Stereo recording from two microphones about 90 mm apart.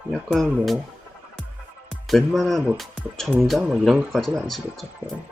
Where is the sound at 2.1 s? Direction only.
Centre (ahead or behind).